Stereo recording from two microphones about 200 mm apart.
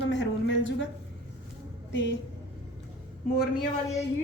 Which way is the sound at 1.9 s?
65° left (ahead or behind).